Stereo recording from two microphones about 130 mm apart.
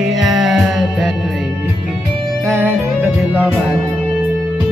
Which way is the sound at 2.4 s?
20° right (ahead or behind).